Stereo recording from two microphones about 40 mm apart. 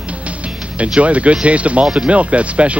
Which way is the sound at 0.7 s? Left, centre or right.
Right.